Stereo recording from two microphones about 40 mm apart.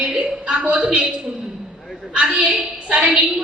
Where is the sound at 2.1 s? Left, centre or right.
Right.